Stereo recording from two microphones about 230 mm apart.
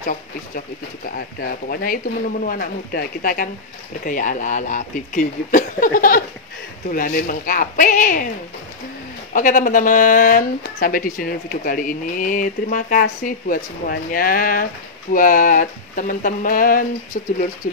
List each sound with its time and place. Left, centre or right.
1.1 s speech: left
9.3 s speech: left